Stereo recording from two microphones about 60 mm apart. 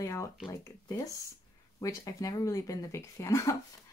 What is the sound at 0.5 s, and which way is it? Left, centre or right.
Speech, left.